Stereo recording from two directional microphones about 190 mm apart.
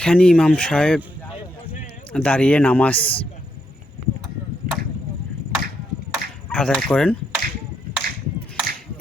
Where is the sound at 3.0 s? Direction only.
30° left (ahead or behind).